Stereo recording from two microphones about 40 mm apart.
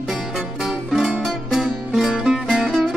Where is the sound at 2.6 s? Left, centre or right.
Centre.